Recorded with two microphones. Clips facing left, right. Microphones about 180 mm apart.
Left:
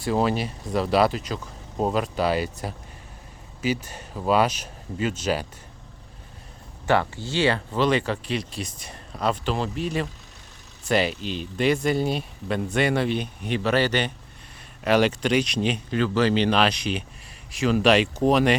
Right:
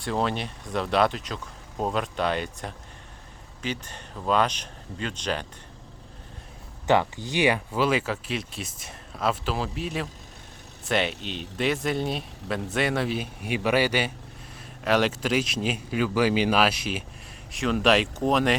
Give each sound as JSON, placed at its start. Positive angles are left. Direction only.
{"t": 0.0, "sound": "speech", "side_deg": 5}
{"t": 6.8, "sound": "speech", "side_deg": -15}